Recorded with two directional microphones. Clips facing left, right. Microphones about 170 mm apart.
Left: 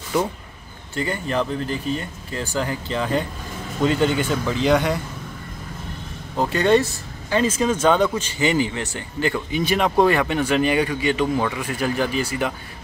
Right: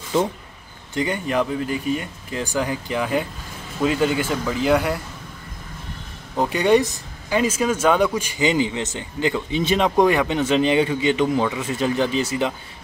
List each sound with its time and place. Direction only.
0.1 s speech: 25° right (ahead or behind); by 5.0 s 5° right (ahead or behind)
6.3 s speech: 15° right (ahead or behind)